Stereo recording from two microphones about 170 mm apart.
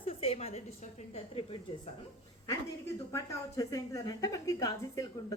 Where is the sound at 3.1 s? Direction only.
20° left (ahead or behind).